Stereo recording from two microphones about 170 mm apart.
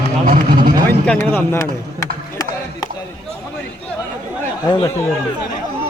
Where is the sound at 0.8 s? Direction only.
10° left (ahead or behind).